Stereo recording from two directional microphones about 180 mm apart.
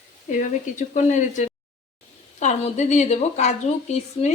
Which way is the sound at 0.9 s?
40° left (ahead or behind).